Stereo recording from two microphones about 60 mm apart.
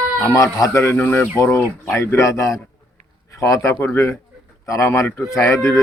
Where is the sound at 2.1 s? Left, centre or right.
Left.